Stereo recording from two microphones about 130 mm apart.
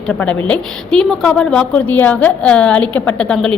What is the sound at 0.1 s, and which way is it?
A woman's voice, 10° left (ahead or behind).